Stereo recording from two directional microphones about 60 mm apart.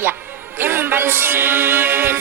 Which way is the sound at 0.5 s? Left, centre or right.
Right.